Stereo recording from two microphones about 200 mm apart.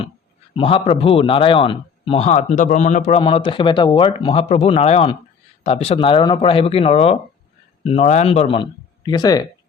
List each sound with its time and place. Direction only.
0.5 s a man's voice: 25° left (ahead or behind)